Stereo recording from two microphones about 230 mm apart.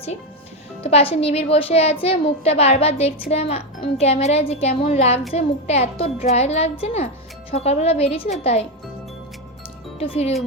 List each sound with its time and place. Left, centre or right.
0.8 s a woman's voice: left
10.0 s a woman's voice: left